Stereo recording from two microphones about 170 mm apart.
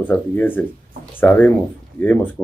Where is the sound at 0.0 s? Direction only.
10° left (ahead or behind).